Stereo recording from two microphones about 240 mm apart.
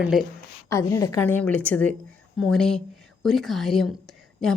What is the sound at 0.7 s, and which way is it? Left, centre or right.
A woman's voice, centre.